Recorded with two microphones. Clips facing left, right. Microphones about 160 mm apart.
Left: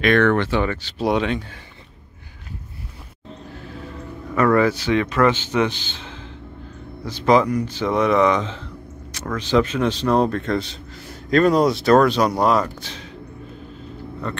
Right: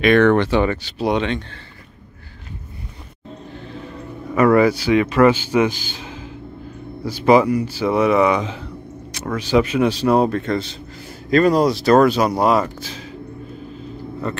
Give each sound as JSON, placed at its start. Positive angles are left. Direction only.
{"t": 0.0, "sound": "a man's voice", "side_deg": -10}
{"t": 0.9, "sound": "a man's voice", "side_deg": 0}
{"t": 4.4, "sound": "a man's voice", "side_deg": -10}
{"t": 14.2, "sound": "a man's voice", "side_deg": -5}